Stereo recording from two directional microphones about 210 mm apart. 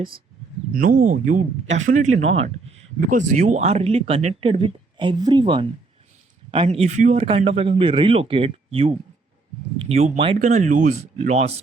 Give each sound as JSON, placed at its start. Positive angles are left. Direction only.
{"t": 0.7, "sound": "speech", "side_deg": -40}